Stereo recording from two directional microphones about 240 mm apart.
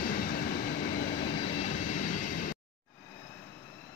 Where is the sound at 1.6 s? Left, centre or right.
Left.